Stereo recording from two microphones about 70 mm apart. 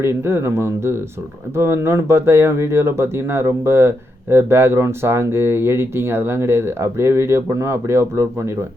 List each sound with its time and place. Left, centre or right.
0.0 s speech: right